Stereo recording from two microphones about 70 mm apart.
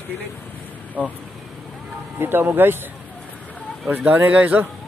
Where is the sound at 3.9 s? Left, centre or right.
Right.